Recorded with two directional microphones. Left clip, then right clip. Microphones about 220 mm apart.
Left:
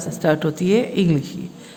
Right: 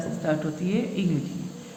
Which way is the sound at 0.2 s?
50° left (ahead or behind).